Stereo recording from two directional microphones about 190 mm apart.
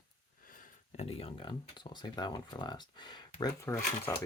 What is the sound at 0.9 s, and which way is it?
Speech, 30° left (ahead or behind).